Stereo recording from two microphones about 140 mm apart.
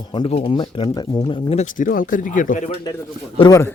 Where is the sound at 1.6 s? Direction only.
70° left (ahead or behind).